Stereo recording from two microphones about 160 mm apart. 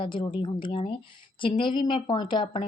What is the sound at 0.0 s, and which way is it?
A woman's voice, 30° left (ahead or behind).